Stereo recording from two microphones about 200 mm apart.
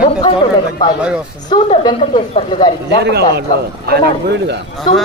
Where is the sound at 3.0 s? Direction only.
60° right (ahead or behind).